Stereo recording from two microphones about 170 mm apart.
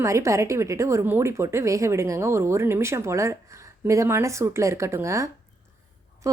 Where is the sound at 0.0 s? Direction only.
15° right (ahead or behind).